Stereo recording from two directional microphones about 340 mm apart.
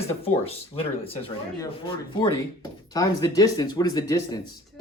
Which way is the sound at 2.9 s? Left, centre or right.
Centre.